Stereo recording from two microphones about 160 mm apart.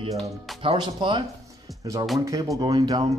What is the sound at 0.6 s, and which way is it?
A man's voice, 30° right (ahead or behind).